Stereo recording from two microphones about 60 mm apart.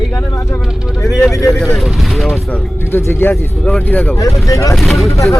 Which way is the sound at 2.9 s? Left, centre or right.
Left.